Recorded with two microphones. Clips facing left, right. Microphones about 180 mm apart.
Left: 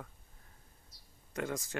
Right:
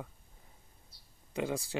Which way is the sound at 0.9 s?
30° right (ahead or behind).